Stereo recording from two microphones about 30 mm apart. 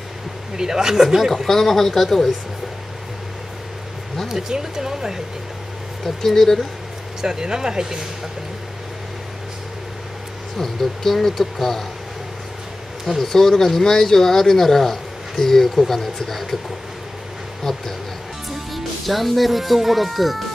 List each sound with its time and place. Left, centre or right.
0.6 s speech: centre
1.5 s speech: centre
4.3 s speech: centre
6.0 s speech: centre
7.2 s speech: right
10.6 s speech: centre
13.2 s speech: centre
18.7 s speech: centre